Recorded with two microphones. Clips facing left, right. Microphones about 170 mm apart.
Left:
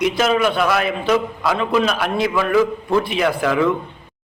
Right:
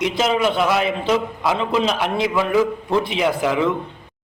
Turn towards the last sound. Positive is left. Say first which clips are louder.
# left 1 dB
turn(degrees=-20)  # may be behind; listen again after turning